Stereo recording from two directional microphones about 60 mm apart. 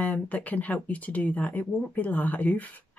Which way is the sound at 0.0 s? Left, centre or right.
Left.